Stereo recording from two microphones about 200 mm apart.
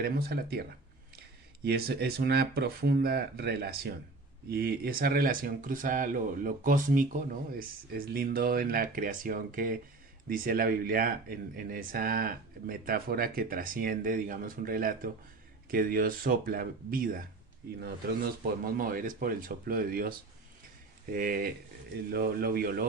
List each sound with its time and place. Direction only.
0.0 s speech: 50° right (ahead or behind)
1.6 s speech: 50° right (ahead or behind)